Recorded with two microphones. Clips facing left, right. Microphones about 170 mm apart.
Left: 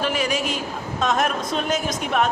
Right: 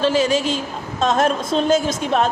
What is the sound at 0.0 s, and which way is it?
A woman's voice, 30° right (ahead or behind).